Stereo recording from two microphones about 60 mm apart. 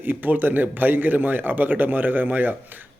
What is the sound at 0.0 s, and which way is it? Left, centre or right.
Speech, right.